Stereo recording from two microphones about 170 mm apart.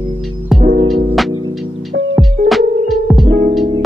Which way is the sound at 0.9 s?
Centre (ahead or behind).